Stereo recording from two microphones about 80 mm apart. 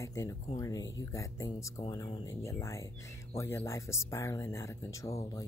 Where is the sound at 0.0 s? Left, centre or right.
Left.